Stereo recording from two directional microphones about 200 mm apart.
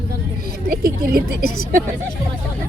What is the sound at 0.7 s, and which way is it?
Speech, 50° right (ahead or behind).